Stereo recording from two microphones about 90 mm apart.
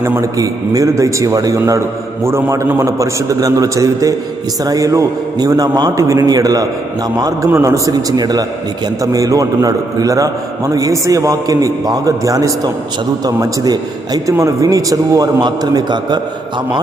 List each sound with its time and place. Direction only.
0.0 s a man's voice: 35° right (ahead or behind)
8.1 s a man's voice: 45° right (ahead or behind)